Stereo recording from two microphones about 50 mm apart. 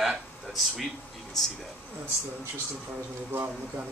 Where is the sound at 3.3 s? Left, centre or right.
Right.